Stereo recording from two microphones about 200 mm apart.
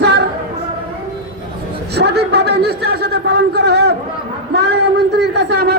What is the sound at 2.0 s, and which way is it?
A man's voice, 55° right (ahead or behind).